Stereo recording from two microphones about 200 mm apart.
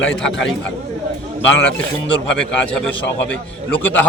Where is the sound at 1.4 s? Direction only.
65° left (ahead or behind).